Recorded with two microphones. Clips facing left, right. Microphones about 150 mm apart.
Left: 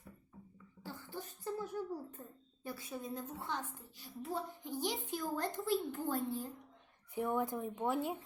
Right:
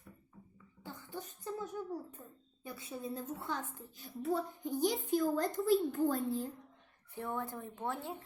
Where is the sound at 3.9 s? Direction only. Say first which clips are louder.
Right 6 dB; 50° right (ahead or behind).